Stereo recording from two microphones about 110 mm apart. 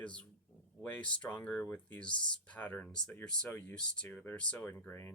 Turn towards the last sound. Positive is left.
turn(degrees=20)  # may be behind; listen again after turning